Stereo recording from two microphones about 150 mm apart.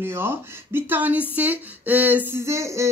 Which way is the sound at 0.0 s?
15° right (ahead or behind).